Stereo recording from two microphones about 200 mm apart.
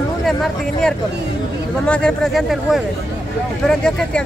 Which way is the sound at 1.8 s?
5° left (ahead or behind).